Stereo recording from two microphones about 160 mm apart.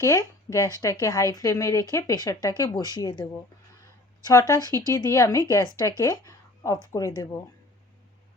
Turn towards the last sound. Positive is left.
turn(degrees=25)  # may be behind; listen again after turning